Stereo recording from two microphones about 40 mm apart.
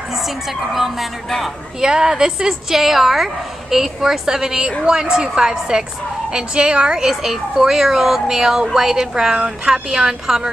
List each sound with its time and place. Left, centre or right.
0.7 s speech: centre
1.8 s speech: centre